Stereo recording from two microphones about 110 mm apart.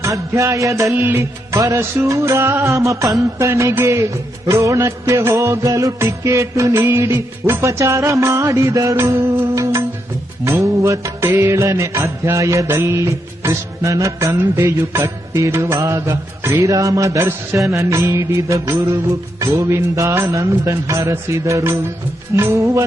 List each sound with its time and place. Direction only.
0.0 s mantra: 30° right (ahead or behind)
0.9 s mantra: 15° right (ahead or behind)
9.4 s music: 25° right (ahead or behind)
10.4 s mantra: 25° right (ahead or behind)